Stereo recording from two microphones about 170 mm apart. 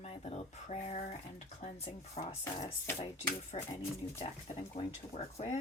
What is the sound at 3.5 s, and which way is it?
Speech, 35° left (ahead or behind).